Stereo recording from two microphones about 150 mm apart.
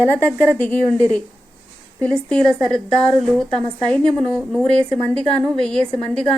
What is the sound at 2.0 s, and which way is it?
A woman's voice, 5° left (ahead or behind).